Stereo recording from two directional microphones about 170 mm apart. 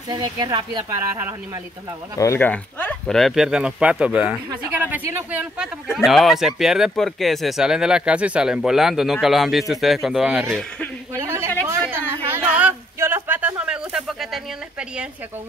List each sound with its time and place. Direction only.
0.1 s speech: 25° right (ahead or behind)
2.1 s speech: 15° left (ahead or behind); by 10.6 s 10° right (ahead or behind)
11.1 s a sound: 15° right (ahead or behind)